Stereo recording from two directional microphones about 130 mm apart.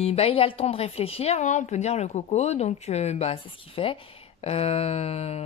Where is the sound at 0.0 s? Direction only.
50° left (ahead or behind).